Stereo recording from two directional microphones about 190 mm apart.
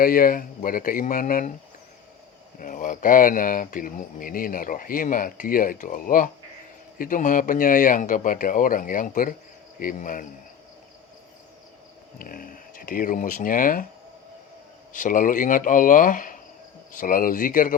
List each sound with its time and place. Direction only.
0.0 s speech: 50° left (ahead or behind)
2.6 s speech: 45° left (ahead or behind)
12.2 s speech: 45° left (ahead or behind)
14.9 s speech: 45° left (ahead or behind)